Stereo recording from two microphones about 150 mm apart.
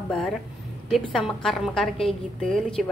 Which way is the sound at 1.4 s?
Centre (ahead or behind).